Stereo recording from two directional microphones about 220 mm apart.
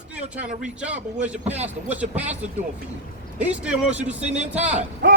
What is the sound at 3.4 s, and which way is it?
Speech, 5° right (ahead or behind).